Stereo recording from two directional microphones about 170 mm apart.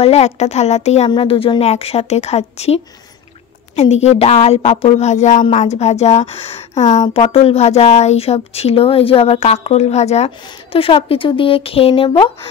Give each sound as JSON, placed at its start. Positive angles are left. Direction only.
{"t": 0.0, "sound": "a woman's voice", "side_deg": 40}
{"t": 3.8, "sound": "a woman's voice", "side_deg": 40}